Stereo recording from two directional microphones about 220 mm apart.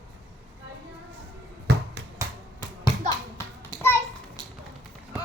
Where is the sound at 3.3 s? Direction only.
10° left (ahead or behind).